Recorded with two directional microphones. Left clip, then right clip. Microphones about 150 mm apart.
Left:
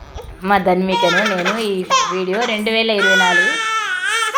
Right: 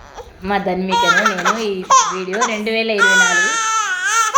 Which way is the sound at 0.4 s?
20° left (ahead or behind).